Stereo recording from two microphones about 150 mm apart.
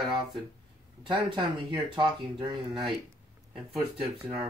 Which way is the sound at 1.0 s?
30° right (ahead or behind).